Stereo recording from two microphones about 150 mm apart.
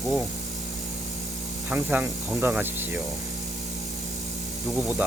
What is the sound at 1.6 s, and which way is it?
Speech, 10° right (ahead or behind).